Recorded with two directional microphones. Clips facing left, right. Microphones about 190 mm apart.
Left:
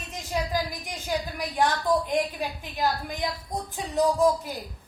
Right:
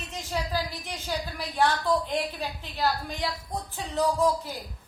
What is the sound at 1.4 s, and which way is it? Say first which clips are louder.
A woman's voice: right 2 dB; 15° left (ahead or behind).